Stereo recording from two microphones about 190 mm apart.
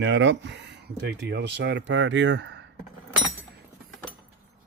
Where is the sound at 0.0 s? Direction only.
75° right (ahead or behind).